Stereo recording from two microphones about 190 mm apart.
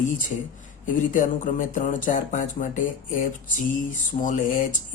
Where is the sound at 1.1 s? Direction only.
45° left (ahead or behind).